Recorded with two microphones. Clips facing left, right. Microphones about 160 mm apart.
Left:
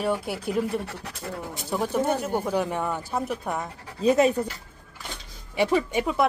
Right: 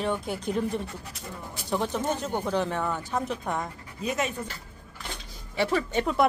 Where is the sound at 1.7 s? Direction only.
5° left (ahead or behind).